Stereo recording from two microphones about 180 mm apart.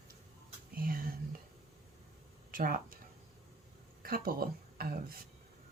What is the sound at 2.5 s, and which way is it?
Speech, 50° right (ahead or behind).